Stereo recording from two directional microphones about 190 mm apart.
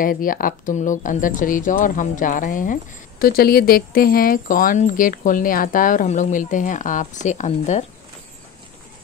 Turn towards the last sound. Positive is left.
turn(degrees=35)  # may be behind; listen again after turning